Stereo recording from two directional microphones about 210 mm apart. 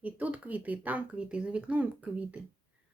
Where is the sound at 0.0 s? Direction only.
5° right (ahead or behind).